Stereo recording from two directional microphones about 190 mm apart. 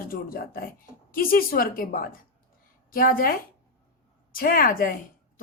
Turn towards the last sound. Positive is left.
turn(degrees=45)  # may be behind; listen again after turning